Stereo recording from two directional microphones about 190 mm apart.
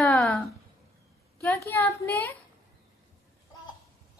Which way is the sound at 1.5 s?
10° left (ahead or behind).